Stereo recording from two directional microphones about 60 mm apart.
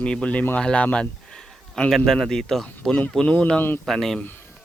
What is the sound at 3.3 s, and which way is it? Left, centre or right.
Speech, left.